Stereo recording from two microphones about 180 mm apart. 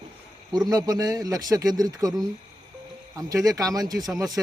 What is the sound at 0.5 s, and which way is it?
A man's voice, 20° right (ahead or behind).